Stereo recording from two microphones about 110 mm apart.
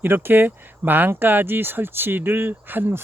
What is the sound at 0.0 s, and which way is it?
Speech, 20° right (ahead or behind).